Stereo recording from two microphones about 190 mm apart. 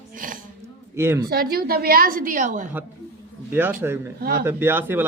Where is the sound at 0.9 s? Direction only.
15° right (ahead or behind).